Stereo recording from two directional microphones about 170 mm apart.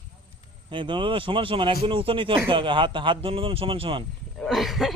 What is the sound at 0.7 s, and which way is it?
Speech, 30° right (ahead or behind).